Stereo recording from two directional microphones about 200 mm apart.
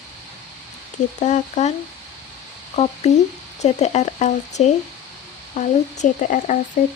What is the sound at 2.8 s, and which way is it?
Speech, 35° left (ahead or behind).